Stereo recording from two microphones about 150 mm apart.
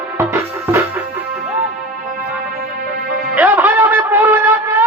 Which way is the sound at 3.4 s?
10° right (ahead or behind).